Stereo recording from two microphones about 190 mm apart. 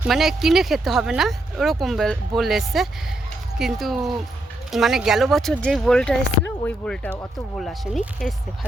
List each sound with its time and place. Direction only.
0.0 s speech: centre (ahead or behind)